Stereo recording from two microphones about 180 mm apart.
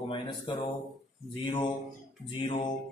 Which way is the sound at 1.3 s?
25° left (ahead or behind).